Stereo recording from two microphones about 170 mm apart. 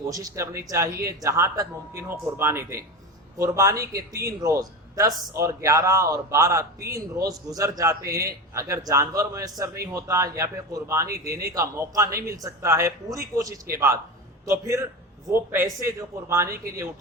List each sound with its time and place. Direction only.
0.0 s a man's voice: 20° right (ahead or behind)